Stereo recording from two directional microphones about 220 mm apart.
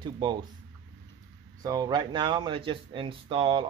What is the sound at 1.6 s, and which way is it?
Speech, 15° right (ahead or behind).